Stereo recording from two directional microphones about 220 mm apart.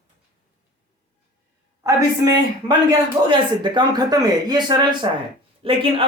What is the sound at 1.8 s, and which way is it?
A man's voice, 15° right (ahead or behind).